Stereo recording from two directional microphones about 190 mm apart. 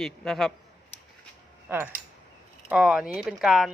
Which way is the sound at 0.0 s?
5° left (ahead or behind).